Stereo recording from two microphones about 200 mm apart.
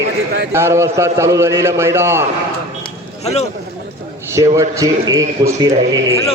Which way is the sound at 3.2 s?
30° left (ahead or behind).